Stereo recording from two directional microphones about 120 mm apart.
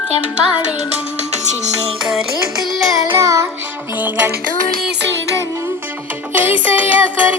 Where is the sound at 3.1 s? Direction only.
25° right (ahead or behind).